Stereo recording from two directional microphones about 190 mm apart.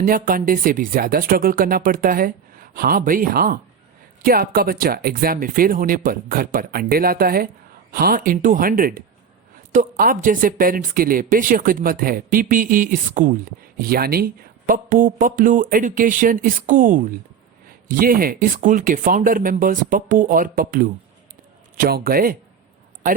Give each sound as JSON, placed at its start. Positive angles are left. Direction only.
{"t": 0.0, "sound": "speech", "side_deg": -50}